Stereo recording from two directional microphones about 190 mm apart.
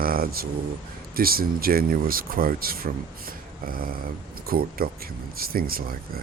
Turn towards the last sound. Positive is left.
turn(degrees=-50)  # may be behind; listen again after turning